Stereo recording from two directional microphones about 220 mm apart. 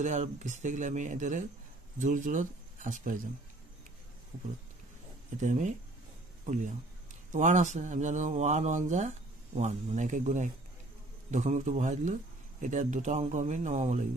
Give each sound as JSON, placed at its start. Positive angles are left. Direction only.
{"t": 0.0, "sound": "speech", "side_deg": -30}
{"t": 5.4, "sound": "speech", "side_deg": -35}